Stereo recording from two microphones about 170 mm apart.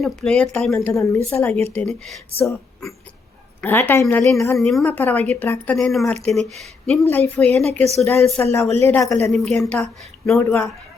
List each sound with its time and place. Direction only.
0.0 s speech: 5° left (ahead or behind)
0.9 s speech: 15° left (ahead or behind)
2.4 s speech: 15° left (ahead or behind)
4.5 s speech: centre (ahead or behind); by 9.3 s 20° left (ahead or behind)
9.3 s speech: centre (ahead or behind)